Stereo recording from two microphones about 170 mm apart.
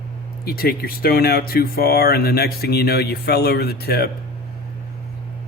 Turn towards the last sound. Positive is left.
turn(degrees=70)  # may be behind; listen again after turning